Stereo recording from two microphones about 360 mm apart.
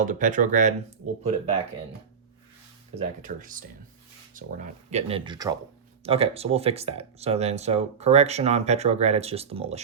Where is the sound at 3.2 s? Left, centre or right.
Right.